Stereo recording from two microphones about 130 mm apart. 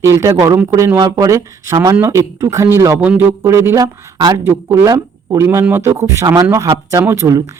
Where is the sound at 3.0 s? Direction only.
10° right (ahead or behind).